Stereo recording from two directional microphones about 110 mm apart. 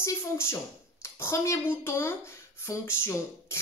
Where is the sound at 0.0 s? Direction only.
25° left (ahead or behind).